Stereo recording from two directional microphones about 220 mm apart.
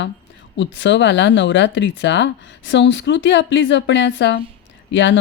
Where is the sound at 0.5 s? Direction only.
55° left (ahead or behind).